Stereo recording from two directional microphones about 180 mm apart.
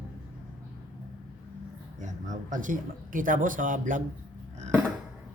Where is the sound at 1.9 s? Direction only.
45° right (ahead or behind).